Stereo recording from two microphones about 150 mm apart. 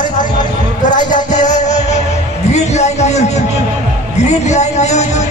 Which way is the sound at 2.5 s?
50° left (ahead or behind).